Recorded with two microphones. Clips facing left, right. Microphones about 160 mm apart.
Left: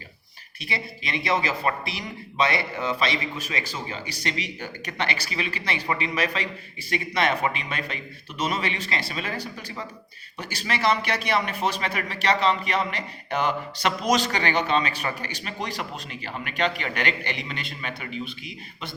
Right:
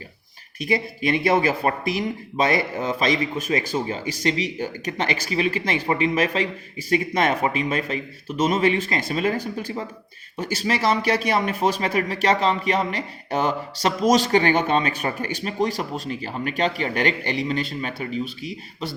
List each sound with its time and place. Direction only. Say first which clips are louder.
0.6 s a man's voice: right 10 dB; 50° right (ahead or behind)